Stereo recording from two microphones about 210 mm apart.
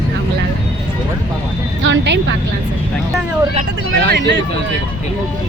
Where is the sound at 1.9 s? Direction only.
55° right (ahead or behind).